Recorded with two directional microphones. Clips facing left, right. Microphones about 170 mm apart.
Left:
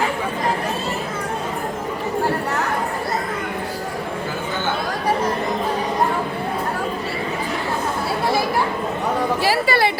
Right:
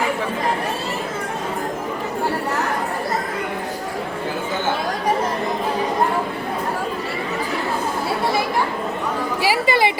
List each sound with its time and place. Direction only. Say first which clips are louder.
9.4 s chatter: right 4 dB; 15° right (ahead or behind)